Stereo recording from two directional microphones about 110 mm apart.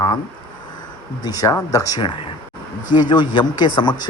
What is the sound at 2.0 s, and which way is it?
Speech, 50° left (ahead or behind).